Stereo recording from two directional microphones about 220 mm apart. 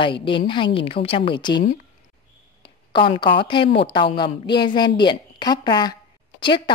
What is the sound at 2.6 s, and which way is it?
A woman's voice, 25° left (ahead or behind).